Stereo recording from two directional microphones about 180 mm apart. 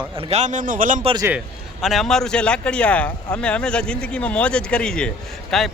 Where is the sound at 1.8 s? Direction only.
Centre (ahead or behind).